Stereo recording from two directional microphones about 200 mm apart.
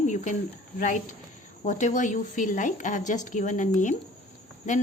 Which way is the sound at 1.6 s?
40° left (ahead or behind).